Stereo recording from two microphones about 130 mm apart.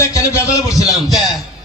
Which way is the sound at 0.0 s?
25° left (ahead or behind).